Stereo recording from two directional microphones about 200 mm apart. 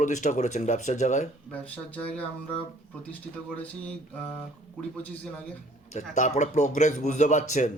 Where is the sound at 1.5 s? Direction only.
5° left (ahead or behind).